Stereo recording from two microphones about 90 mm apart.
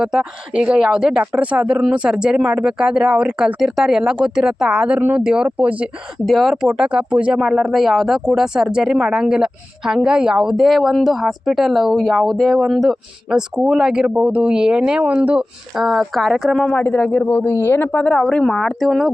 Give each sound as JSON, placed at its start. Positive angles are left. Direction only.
{"t": 0.0, "sound": "speech", "side_deg": -10}
{"t": 6.2, "sound": "speech", "side_deg": 0}
{"t": 15.7, "sound": "speech", "side_deg": -5}
{"t": 16.6, "sound": "speech", "side_deg": 20}